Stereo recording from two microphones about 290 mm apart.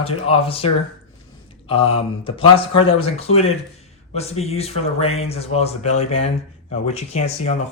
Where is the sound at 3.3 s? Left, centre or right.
Left.